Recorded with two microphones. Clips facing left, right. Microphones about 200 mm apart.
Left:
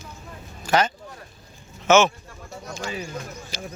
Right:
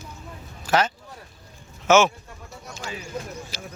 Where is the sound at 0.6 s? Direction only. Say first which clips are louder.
Left 1 dB; 5° right (ahead or behind).